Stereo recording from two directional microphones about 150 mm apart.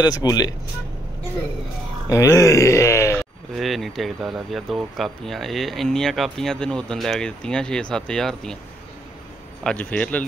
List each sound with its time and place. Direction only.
0.0 s speech: 25° left (ahead or behind)
2.0 s speech: 20° left (ahead or behind)
3.5 s speech: centre (ahead or behind)
9.6 s a man's voice: 10° left (ahead or behind)